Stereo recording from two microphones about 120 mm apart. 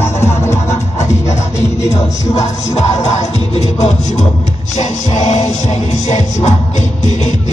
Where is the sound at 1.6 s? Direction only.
25° left (ahead or behind).